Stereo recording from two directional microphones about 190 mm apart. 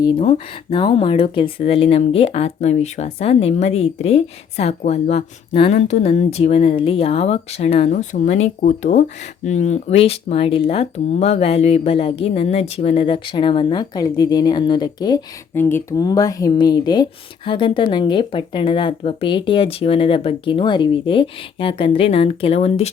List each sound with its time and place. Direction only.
0.0 s speech: 30° left (ahead or behind)